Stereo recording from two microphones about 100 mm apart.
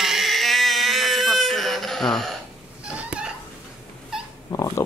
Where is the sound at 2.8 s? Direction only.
10° right (ahead or behind).